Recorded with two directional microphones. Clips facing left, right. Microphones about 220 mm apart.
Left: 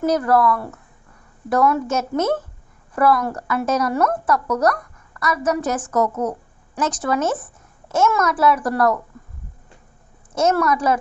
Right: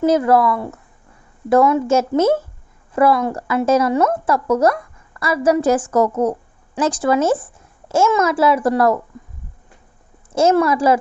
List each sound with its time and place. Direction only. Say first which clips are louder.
0.3 s a woman's voice: right 2 dB; 25° right (ahead or behind)
10.3 s a woman's voice: right 4 dB; 30° right (ahead or behind)